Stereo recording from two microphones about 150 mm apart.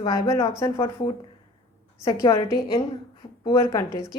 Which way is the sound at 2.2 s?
25° left (ahead or behind).